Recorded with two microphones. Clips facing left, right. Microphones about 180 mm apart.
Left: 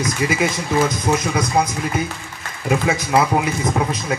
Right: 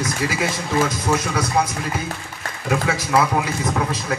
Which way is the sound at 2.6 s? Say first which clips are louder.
Left 3 dB; 20° left (ahead or behind).